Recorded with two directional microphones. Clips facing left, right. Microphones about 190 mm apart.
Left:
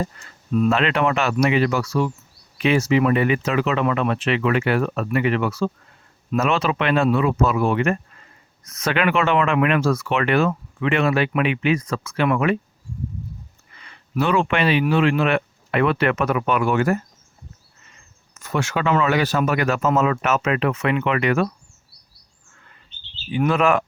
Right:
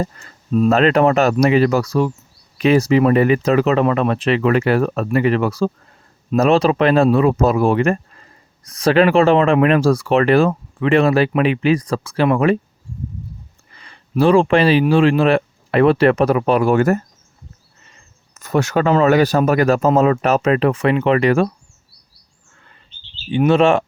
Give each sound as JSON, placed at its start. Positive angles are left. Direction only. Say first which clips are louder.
{"t": 0.0, "sound": "speech", "louder": "right 4 dB", "side_deg": -40}
{"t": 13.7, "sound": "speech", "louder": "right 6 dB", "side_deg": -35}
{"t": 18.3, "sound": "speech", "louder": "right 7 dB", "side_deg": -40}
{"t": 23.3, "sound": "speech", "louder": "right 5 dB", "side_deg": -25}